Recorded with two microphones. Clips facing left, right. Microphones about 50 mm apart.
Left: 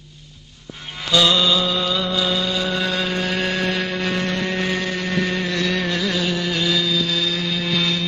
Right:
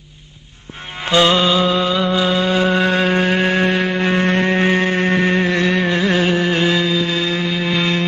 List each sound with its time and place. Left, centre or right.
1.0 s mantra: right